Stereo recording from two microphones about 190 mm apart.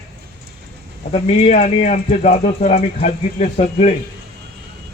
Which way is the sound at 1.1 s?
40° left (ahead or behind).